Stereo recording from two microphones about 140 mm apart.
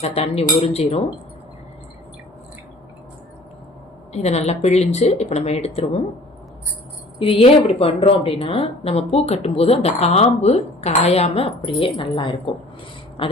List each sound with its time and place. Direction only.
0.0 s a woman's voice: 45° left (ahead or behind)
4.1 s a woman's voice: 50° left (ahead or behind)
7.2 s a woman's voice: 40° left (ahead or behind)